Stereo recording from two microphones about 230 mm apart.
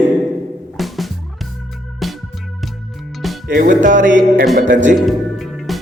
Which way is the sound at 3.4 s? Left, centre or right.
Right.